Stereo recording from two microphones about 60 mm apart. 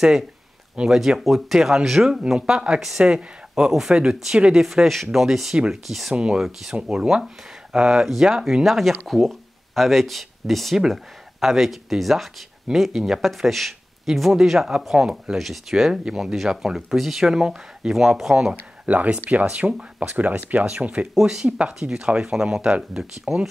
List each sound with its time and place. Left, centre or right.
0.7 s speech: centre
18.9 s speech: right
21.1 s speech: centre